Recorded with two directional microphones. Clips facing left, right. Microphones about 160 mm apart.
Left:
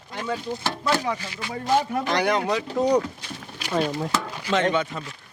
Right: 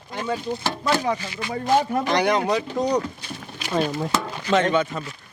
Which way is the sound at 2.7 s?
10° left (ahead or behind).